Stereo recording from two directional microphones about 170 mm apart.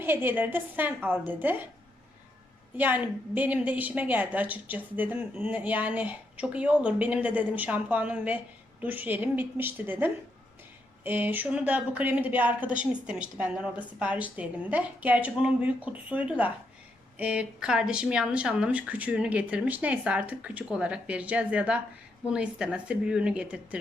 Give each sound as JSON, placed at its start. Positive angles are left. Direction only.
{"t": 0.0, "sound": "a woman's voice", "side_deg": -10}
{"t": 2.7, "sound": "a woman's voice", "side_deg": -10}